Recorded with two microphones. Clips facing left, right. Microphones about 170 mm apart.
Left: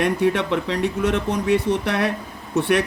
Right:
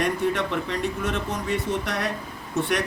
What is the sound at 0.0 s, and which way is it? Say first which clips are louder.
Speech: left 4 dB; 65° left (ahead or behind).